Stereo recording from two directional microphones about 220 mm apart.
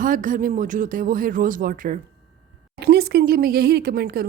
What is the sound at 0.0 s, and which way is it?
A woman's voice, 35° right (ahead or behind).